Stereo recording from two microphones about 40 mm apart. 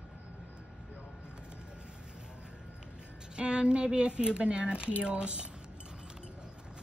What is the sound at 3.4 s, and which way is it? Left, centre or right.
Speech, right.